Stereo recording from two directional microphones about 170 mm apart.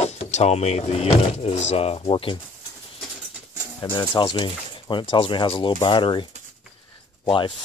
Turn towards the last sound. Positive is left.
turn(degrees=30)  # may be behind; listen again after turning